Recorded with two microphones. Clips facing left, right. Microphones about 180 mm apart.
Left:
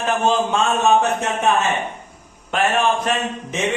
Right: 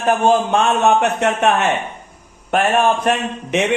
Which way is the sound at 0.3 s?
65° right (ahead or behind).